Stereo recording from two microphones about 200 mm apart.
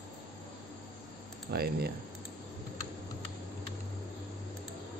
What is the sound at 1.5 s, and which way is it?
Speech, 50° right (ahead or behind).